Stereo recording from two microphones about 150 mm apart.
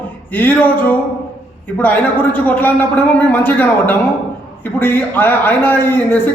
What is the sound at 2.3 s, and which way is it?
A man's voice, 10° left (ahead or behind).